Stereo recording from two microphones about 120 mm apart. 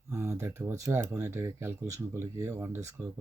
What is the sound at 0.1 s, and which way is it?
Speech, 25° right (ahead or behind).